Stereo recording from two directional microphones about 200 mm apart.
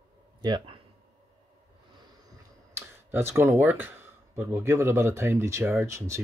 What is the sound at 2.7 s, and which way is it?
Speech, 10° right (ahead or behind).